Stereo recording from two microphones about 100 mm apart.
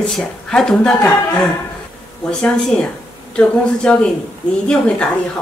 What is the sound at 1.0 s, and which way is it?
Speech, 15° left (ahead or behind).